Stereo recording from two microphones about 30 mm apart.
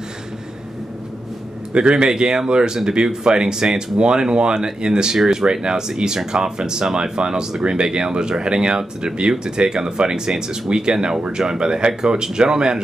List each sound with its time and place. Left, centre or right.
1.7 s speech: right